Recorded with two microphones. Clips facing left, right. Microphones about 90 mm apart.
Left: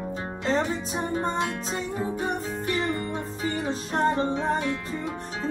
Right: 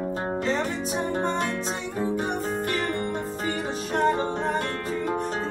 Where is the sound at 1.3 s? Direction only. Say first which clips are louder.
Even; 40° right (ahead or behind).